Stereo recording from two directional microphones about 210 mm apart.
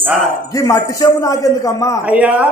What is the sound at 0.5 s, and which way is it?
A man's voice, 15° left (ahead or behind).